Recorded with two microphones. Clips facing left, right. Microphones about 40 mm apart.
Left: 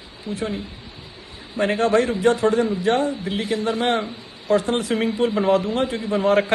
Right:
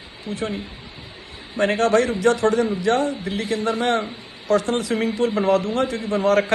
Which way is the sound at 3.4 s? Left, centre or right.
Right.